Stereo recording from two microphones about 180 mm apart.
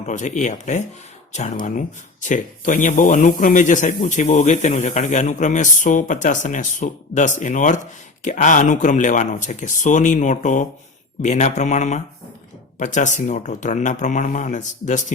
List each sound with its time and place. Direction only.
0.0 s a man's voice: 40° left (ahead or behind)